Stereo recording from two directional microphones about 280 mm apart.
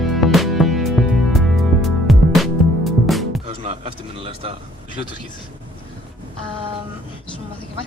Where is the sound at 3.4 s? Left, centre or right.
Centre.